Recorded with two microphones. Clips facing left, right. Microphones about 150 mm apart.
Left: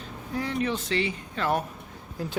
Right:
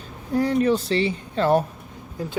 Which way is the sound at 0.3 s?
40° right (ahead or behind).